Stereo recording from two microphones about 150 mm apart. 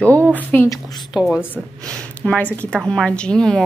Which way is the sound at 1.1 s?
5° right (ahead or behind).